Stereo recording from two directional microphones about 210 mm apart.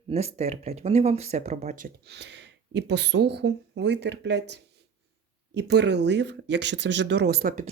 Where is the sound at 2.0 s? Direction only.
55° right (ahead or behind).